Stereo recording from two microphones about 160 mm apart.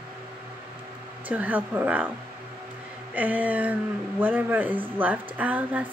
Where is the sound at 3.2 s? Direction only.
10° right (ahead or behind).